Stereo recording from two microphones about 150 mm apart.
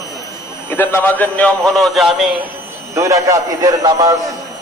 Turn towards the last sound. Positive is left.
turn(degrees=-25)  # may be behind; listen again after turning